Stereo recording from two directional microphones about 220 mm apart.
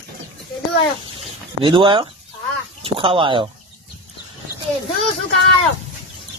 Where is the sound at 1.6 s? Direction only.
25° right (ahead or behind).